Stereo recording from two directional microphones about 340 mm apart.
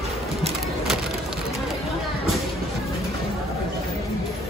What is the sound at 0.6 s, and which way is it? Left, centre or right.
Splinter, centre.